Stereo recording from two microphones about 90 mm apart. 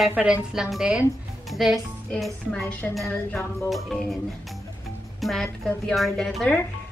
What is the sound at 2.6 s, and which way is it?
A woman's voice, 20° left (ahead or behind).